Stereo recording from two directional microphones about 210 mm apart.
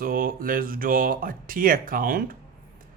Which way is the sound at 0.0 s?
40° right (ahead or behind).